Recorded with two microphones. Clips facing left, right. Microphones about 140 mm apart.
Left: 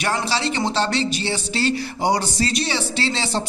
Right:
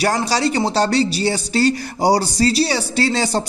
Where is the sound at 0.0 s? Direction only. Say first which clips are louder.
Right 5 dB; 40° right (ahead or behind).